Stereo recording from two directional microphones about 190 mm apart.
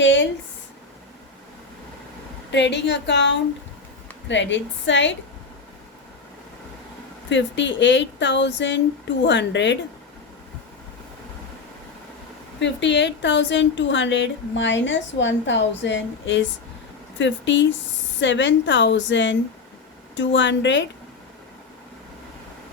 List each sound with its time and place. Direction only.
0.0 s a sound: 75° left (ahead or behind)
2.5 s a woman's voice: 65° left (ahead or behind)
7.3 s a woman's voice: 70° left (ahead or behind)
12.5 s a woman's voice: 70° left (ahead or behind)